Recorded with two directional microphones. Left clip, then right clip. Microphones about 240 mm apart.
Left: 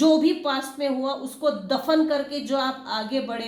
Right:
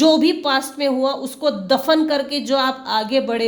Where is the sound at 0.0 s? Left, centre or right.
Right.